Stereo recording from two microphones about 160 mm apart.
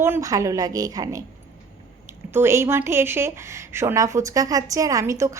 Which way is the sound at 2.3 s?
15° right (ahead or behind).